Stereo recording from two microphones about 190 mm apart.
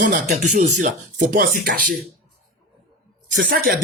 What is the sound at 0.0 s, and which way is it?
Speech, 40° right (ahead or behind).